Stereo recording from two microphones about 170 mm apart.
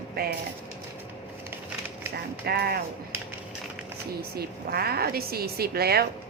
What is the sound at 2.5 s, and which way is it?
Speech, 65° right (ahead or behind).